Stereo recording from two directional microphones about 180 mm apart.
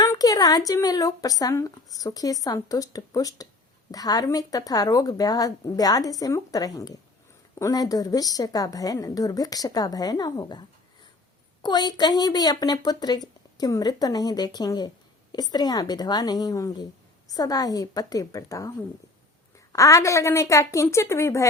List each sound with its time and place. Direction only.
0.0 s speech: 20° left (ahead or behind)
19.7 s a woman's voice: 15° left (ahead or behind)